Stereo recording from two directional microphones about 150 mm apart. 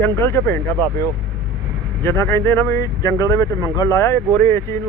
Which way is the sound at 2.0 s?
20° left (ahead or behind).